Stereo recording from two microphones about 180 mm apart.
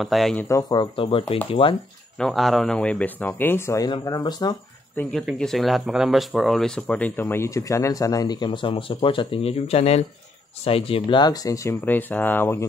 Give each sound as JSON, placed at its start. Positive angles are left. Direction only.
{"t": 0.0, "sound": "speech", "side_deg": 0}
{"t": 0.5, "sound": "speech", "side_deg": 20}
{"t": 2.1, "sound": "speech", "side_deg": 0}
{"t": 5.0, "sound": "speech", "side_deg": 10}